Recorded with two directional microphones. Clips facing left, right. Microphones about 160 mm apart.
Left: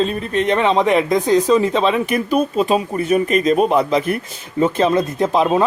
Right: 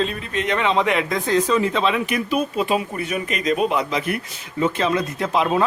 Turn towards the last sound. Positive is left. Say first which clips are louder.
# left 5 dB
turn(degrees=25)  # may be behind; listen again after turning